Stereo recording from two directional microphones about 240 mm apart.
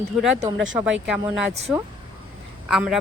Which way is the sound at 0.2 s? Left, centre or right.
Centre.